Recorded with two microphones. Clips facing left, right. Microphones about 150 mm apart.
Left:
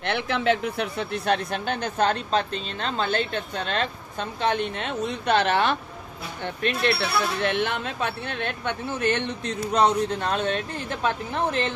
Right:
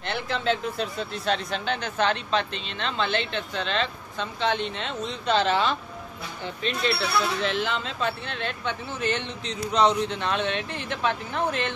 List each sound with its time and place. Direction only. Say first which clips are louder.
0.0 s speech: left 3 dB; 60° left (ahead or behind); by 11.7 s 40° left (ahead or behind)